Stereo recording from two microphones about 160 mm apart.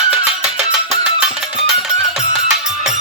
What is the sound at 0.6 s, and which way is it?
Music, 5° right (ahead or behind).